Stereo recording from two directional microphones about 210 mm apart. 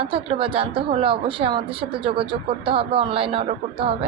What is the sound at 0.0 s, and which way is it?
A woman's voice, 25° right (ahead or behind).